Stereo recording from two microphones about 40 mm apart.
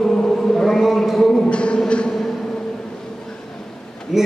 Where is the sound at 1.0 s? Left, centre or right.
Centre.